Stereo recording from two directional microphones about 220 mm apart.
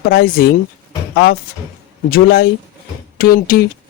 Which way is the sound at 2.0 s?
45° left (ahead or behind).